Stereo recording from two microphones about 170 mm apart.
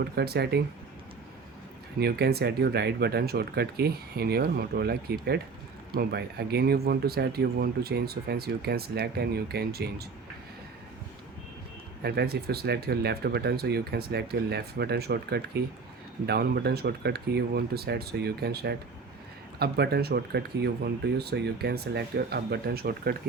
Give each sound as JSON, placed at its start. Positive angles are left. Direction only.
{"t": 0.0, "sound": "speech", "side_deg": -70}
{"t": 2.0, "sound": "speech", "side_deg": -70}
{"t": 12.0, "sound": "speech", "side_deg": -70}